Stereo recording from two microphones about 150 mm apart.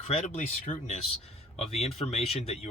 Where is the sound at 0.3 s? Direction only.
50° left (ahead or behind).